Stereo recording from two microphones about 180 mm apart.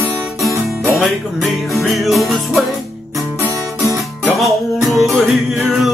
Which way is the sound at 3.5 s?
15° right (ahead or behind).